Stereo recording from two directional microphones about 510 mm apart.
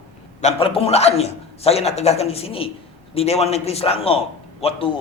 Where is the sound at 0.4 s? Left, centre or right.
Centre.